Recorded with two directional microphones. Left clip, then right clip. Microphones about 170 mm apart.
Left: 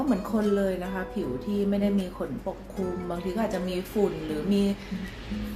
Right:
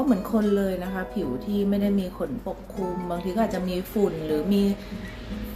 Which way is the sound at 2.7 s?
Centre (ahead or behind).